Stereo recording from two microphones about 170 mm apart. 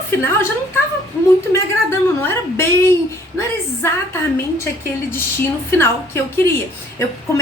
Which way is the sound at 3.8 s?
15° left (ahead or behind).